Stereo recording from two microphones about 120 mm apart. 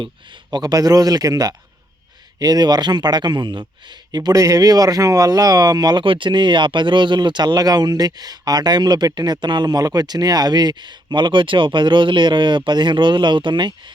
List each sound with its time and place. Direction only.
0.0 s speech: 40° right (ahead or behind)